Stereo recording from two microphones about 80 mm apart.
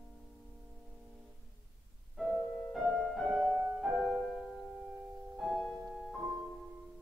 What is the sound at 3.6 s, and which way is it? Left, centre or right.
Music, centre.